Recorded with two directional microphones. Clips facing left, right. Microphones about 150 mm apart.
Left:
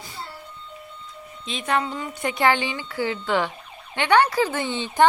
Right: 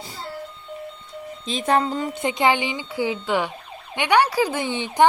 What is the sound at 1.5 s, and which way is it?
Speech, 35° right (ahead or behind).